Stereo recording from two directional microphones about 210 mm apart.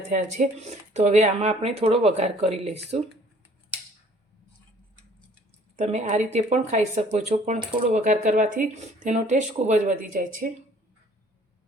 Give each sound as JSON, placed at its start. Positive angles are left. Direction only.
{"t": 0.1, "sound": "speech", "side_deg": -35}
{"t": 5.7, "sound": "speech", "side_deg": -35}